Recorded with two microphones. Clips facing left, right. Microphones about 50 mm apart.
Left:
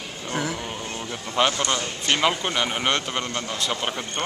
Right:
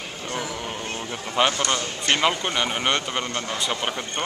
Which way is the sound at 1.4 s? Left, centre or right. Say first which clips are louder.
Even; centre.